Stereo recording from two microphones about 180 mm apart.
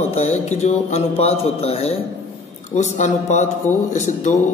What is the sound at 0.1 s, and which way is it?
A man's voice, 35° left (ahead or behind).